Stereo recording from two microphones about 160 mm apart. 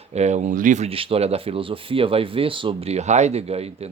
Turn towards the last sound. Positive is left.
turn(degrees=-40)  # may be behind; listen again after turning